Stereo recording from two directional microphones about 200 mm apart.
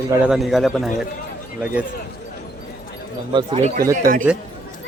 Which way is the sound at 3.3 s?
30° right (ahead or behind).